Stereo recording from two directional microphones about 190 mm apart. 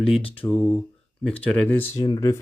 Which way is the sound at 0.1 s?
30° left (ahead or behind).